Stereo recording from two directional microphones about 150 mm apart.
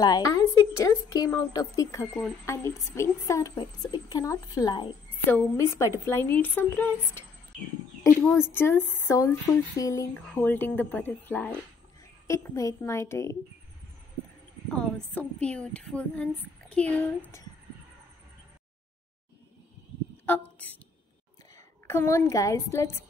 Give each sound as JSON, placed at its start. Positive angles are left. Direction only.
{"t": 0.0, "sound": "a woman's voice", "side_deg": 25}
{"t": 5.3, "sound": "a woman's voice", "side_deg": 15}
{"t": 8.3, "sound": "a woman's voice", "side_deg": 15}
{"t": 10.1, "sound": "a woman's voice", "side_deg": 10}
{"t": 15.1, "sound": "a woman's voice", "side_deg": 10}
{"t": 20.2, "sound": "a woman's voice", "side_deg": 10}